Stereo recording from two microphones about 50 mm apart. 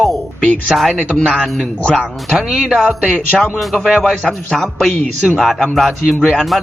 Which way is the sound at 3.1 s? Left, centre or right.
Left.